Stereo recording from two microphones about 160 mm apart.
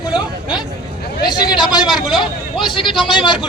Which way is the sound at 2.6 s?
30° left (ahead or behind).